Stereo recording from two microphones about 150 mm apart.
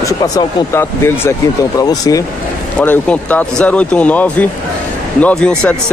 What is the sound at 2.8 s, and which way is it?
Speech, 10° left (ahead or behind).